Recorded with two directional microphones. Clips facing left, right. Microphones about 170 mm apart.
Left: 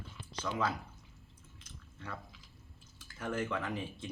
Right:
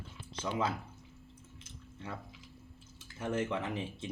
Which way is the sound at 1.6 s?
25° right (ahead or behind).